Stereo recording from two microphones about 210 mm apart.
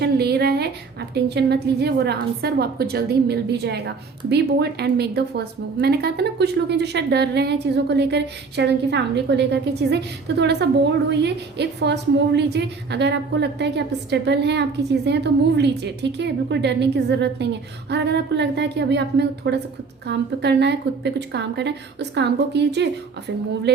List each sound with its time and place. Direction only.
0.0 s a woman's voice: 50° right (ahead or behind)